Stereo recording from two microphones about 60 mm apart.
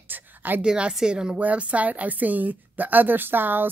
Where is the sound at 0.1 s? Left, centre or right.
Right.